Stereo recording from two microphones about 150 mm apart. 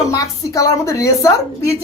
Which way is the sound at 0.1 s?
25° left (ahead or behind).